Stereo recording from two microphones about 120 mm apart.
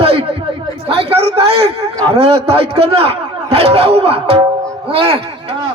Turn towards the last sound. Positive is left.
turn(degrees=-55)  # may be behind; listen again after turning